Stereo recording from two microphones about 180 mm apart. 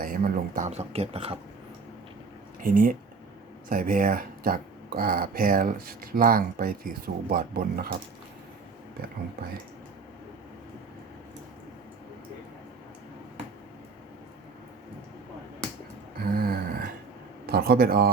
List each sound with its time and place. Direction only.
0.0 s speech: 55° right (ahead or behind); by 1.4 s 35° right (ahead or behind)
2.6 s speech: 50° right (ahead or behind)
16.2 s gasp: 55° right (ahead or behind)
17.5 s speech: 60° right (ahead or behind)